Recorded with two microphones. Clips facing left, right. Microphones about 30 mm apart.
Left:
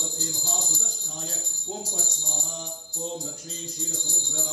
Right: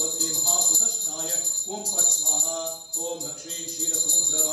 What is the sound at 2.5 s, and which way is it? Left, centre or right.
Music, centre.